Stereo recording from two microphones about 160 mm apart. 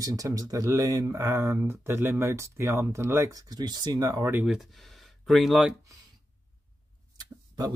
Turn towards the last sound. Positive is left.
turn(degrees=-25)  # may be behind; listen again after turning